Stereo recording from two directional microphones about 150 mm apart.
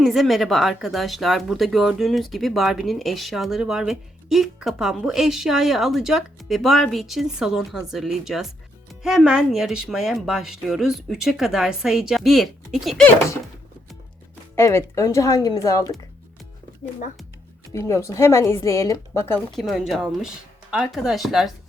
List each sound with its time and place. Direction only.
0.0 s speech: centre (ahead or behind)
14.5 s speech: 15° left (ahead or behind)
17.7 s a woman's voice: 20° left (ahead or behind)
19.5 s speech: centre (ahead or behind)